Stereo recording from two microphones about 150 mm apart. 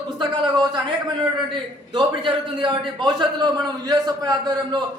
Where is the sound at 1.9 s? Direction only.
35° right (ahead or behind).